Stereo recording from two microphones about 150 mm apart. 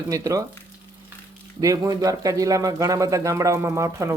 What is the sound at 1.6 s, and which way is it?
Speech, 25° right (ahead or behind).